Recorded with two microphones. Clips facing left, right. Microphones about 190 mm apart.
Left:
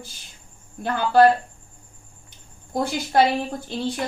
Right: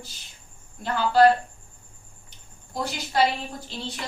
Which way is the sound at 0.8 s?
55° left (ahead or behind).